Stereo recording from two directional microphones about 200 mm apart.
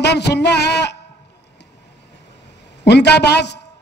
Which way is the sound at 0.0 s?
55° left (ahead or behind).